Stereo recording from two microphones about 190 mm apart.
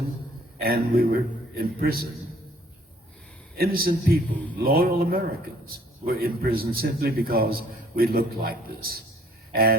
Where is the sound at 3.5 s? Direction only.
50° right (ahead or behind).